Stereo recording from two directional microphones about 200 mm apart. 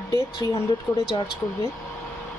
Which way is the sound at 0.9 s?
15° left (ahead or behind).